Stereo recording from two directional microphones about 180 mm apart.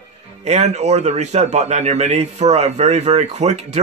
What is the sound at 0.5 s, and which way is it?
A man's voice, 40° right (ahead or behind).